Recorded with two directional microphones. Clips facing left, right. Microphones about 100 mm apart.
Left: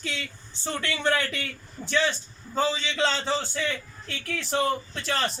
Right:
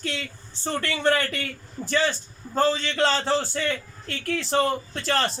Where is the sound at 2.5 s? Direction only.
50° right (ahead or behind).